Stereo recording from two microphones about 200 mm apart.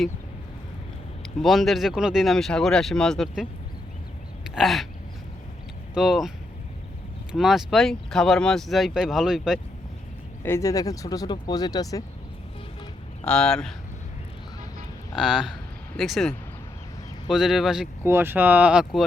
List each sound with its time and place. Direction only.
1.4 s speech: centre (ahead or behind)
4.5 s speech: centre (ahead or behind)
5.9 s speech: centre (ahead or behind)
7.3 s speech: centre (ahead or behind)
10.4 s speech: 15° left (ahead or behind)
13.2 s speech: 5° left (ahead or behind)
15.1 s speech: 5° right (ahead or behind)